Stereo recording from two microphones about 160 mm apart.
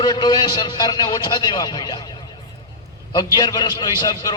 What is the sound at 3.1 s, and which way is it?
A man's voice, 25° left (ahead or behind).